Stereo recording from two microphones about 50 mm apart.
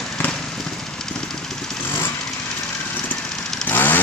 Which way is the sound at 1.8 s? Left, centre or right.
Left.